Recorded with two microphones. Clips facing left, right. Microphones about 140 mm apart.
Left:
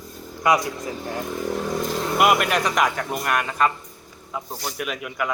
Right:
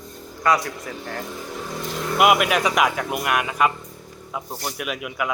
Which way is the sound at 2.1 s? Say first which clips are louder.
Right 2 dB; 5° right (ahead or behind).